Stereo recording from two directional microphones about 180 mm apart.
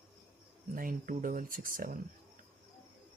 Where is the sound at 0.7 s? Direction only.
50° right (ahead or behind).